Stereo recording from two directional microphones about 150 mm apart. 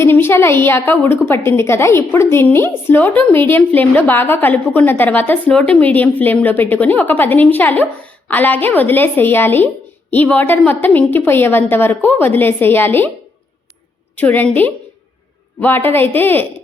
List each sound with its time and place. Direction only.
0.0 s a woman's voice: 15° left (ahead or behind)
14.2 s a woman's voice: 10° left (ahead or behind)